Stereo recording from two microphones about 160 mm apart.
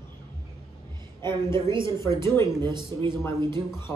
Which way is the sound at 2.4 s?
25° right (ahead or behind).